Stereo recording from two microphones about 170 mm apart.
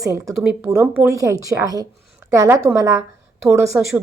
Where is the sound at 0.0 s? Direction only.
15° right (ahead or behind).